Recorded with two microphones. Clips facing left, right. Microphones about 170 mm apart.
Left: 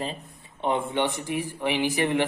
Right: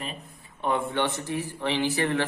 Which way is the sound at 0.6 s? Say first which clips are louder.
Left 1 dB; 20° left (ahead or behind).